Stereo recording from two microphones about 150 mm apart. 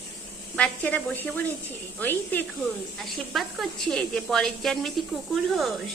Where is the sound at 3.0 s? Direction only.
Centre (ahead or behind).